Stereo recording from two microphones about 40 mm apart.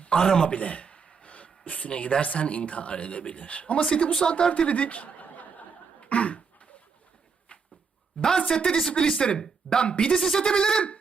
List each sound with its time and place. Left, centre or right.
0.1 s a woman's voice: centre
0.5 s speech: left
3.8 s a woman's voice: left
4.7 s snicker: left
6.0 s throat clearing: left
8.2 s a woman's voice: centre
9.4 s speech: centre
9.8 s a woman's voice: left
10.2 s speech: centre
10.4 s a woman's voice: centre